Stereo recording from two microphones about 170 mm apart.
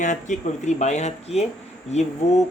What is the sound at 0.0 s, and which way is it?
Speech, 45° left (ahead or behind).